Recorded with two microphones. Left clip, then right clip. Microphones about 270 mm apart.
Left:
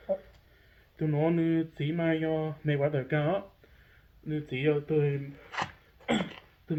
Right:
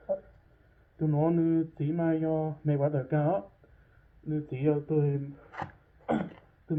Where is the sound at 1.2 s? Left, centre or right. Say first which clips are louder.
Right 1 dB; left.